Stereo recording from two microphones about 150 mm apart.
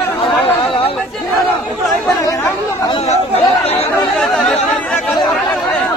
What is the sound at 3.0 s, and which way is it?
Chatter, 45° left (ahead or behind).